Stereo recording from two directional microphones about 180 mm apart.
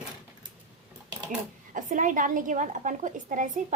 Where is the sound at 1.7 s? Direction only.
45° right (ahead or behind).